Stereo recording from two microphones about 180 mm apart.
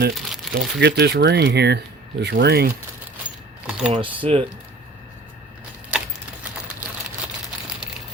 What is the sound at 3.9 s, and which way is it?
Speech, 30° right (ahead or behind).